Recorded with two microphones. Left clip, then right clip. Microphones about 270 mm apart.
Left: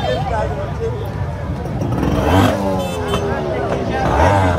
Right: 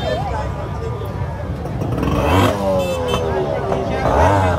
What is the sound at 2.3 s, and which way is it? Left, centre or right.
Vehicle, right.